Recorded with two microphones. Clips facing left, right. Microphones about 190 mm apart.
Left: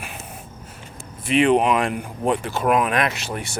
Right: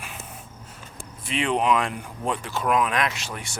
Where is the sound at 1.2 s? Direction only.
60° left (ahead or behind).